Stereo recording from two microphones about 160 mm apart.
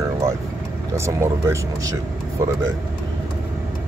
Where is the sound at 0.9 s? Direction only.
15° right (ahead or behind).